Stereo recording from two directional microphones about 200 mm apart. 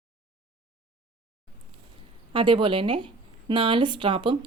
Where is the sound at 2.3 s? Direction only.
25° right (ahead or behind).